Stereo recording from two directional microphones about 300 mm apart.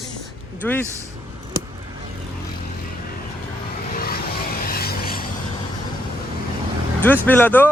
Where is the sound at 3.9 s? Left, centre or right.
Left.